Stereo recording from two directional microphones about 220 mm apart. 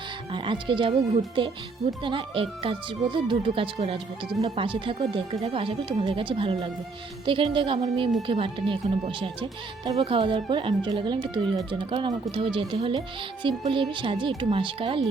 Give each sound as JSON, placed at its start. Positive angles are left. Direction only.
{"t": 0.3, "sound": "speech", "side_deg": -20}